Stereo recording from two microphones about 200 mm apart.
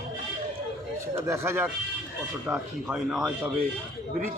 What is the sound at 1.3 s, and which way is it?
Speech, 10° right (ahead or behind).